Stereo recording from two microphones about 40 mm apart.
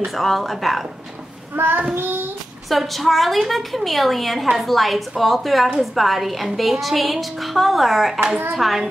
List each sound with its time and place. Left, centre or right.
0.1 s a woman's voice: centre
1.6 s child singing: right
2.7 s a woman's voice: centre